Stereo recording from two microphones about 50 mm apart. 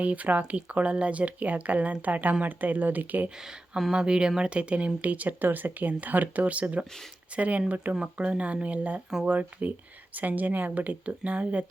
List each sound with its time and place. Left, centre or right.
0.0 s speech: right
3.9 s speech: centre